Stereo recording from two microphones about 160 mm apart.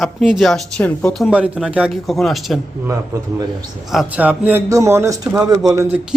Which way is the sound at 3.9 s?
5° right (ahead or behind).